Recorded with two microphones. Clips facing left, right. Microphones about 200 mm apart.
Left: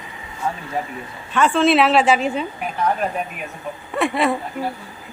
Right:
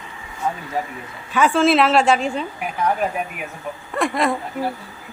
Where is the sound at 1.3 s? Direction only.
Centre (ahead or behind).